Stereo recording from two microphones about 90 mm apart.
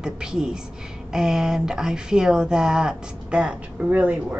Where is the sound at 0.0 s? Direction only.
10° right (ahead or behind).